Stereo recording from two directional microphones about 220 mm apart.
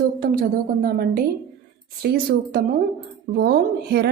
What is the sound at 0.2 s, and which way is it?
A woman's voice, 40° right (ahead or behind).